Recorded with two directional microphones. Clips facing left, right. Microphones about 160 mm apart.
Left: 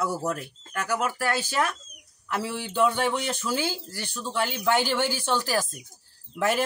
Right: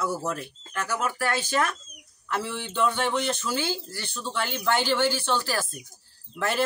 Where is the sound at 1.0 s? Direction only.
10° left (ahead or behind).